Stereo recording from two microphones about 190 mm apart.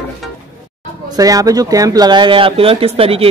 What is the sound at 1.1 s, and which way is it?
Speech, 20° right (ahead or behind).